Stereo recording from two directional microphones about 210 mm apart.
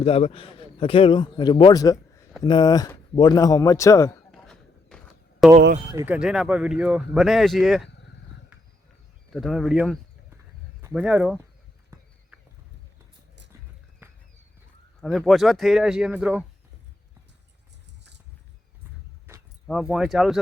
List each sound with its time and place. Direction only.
0.0 s a man's voice: 30° left (ahead or behind); by 4.1 s 15° left (ahead or behind)
4.3 s a sound: 5° left (ahead or behind)
5.9 s speech: 15° right (ahead or behind)
6.1 s speech: 5° right (ahead or behind)
9.3 s speech: centre (ahead or behind)
11.9 s horse: 15° right (ahead or behind)
15.0 s speech: centre (ahead or behind)
19.3 s keys jangling: 10° right (ahead or behind)
19.6 s speech: centre (ahead or behind)